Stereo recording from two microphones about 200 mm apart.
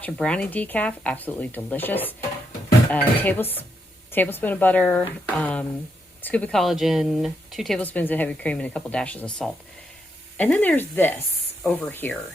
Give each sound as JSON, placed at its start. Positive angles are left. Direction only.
{"t": 0.0, "sound": "speech", "side_deg": 5}